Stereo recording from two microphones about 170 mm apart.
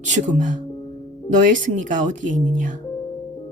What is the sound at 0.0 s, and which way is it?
Speech, 45° right (ahead or behind).